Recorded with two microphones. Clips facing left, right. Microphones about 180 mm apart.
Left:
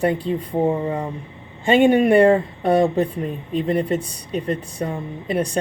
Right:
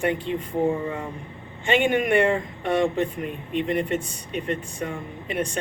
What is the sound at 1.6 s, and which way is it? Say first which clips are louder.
Speech: left 7 dB; 35° left (ahead or behind).